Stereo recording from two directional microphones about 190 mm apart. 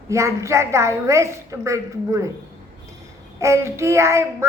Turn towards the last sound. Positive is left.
turn(degrees=-15)  # may be behind; listen again after turning